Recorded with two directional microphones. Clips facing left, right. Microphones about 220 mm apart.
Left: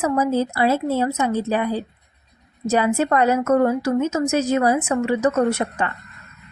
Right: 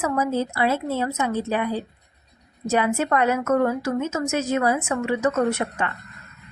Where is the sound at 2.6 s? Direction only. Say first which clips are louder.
Left 3 dB; 35° left (ahead or behind).